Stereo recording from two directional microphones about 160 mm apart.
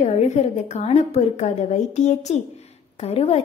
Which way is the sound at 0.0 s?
45° left (ahead or behind).